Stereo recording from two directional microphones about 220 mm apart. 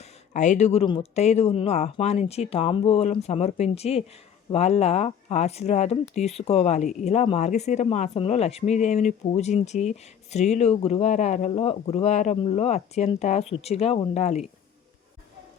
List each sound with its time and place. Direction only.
0.0 s speech: 30° left (ahead or behind)